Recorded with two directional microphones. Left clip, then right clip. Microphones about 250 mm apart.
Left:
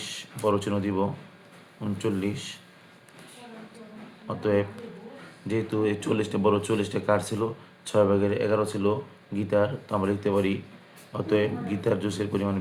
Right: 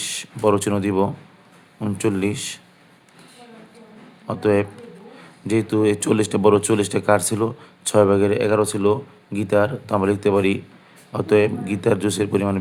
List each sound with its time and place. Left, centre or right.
0.4 s a man's voice: right
4.3 s a man's voice: right